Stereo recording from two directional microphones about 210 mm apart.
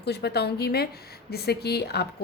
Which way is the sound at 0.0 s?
50° left (ahead or behind).